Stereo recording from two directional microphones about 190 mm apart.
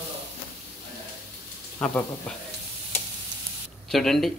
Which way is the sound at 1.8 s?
5° left (ahead or behind).